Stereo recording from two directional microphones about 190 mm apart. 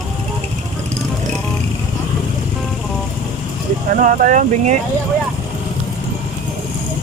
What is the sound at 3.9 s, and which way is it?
Speech, 45° right (ahead or behind).